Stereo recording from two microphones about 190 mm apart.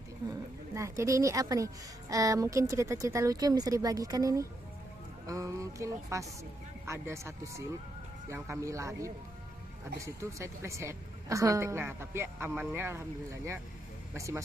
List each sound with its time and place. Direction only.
0.7 s a woman's voice: 15° right (ahead or behind)